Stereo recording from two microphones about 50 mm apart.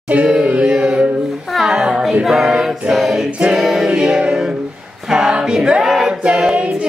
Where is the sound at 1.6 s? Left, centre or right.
Centre.